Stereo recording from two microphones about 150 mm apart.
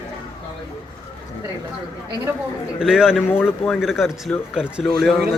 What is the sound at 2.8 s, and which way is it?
Speech, 5° right (ahead or behind).